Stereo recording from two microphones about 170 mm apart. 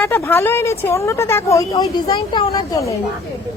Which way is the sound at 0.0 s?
10° left (ahead or behind).